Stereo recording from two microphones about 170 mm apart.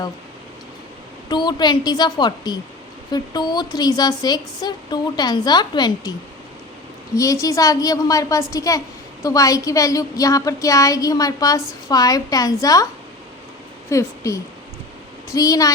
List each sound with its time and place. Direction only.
1.3 s a woman's voice: 25° left (ahead or behind)
7.2 s a woman's voice: 20° left (ahead or behind)
13.9 s a woman's voice: 20° left (ahead or behind)